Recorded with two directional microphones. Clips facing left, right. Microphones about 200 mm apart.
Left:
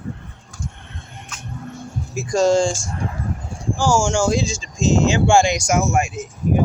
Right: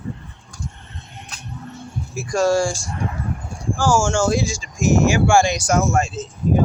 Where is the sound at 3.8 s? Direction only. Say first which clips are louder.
Even; 15° left (ahead or behind).